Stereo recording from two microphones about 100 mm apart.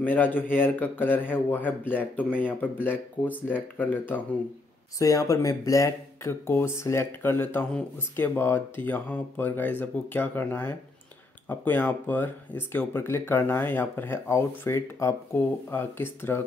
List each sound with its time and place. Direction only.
0.0 s speech: 15° left (ahead or behind)
4.9 s speech: 35° left (ahead or behind)